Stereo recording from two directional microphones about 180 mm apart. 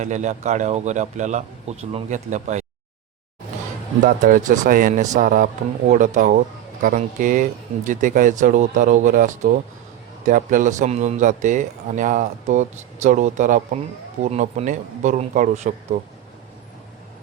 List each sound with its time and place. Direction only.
0.0 s a man's voice: 40° right (ahead or behind)
4.0 s a man's voice: 45° right (ahead or behind)